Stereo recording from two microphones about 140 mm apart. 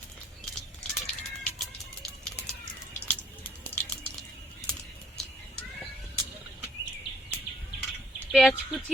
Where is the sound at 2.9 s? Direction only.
10° left (ahead or behind).